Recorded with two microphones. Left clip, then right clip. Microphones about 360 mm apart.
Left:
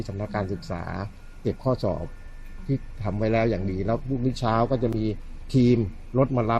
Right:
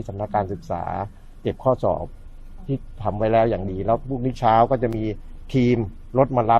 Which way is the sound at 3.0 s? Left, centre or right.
Right.